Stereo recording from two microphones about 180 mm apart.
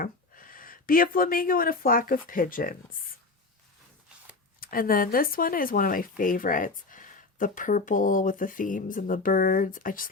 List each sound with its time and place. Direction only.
0.0 s speech: 50° left (ahead or behind)
4.6 s speech: 50° left (ahead or behind)